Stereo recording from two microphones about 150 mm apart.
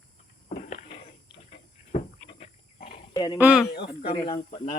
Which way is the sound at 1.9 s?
45° left (ahead or behind).